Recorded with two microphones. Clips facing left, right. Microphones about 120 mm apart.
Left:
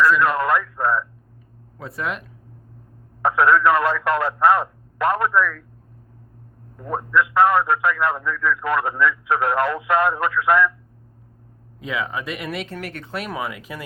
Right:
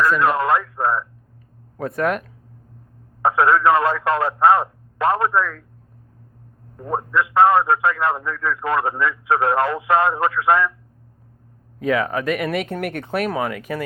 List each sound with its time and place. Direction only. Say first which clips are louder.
0.2 s a man's voice: right 1 dB; 25° right (ahead or behind)
1.8 s speech: right 7 dB; 50° right (ahead or behind)
3.2 s a man's voice: even; 25° right (ahead or behind)
6.7 s a man's voice: left 1 dB; 25° right (ahead or behind)
11.8 s speech: right 7 dB; 50° right (ahead or behind)